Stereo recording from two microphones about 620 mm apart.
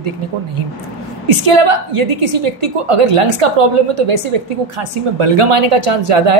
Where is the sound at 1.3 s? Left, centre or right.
Right.